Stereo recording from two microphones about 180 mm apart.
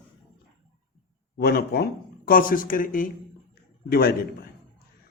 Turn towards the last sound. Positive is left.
turn(degrees=60)  # may be behind; listen again after turning